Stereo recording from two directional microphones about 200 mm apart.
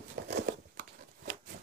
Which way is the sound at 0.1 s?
50° right (ahead or behind).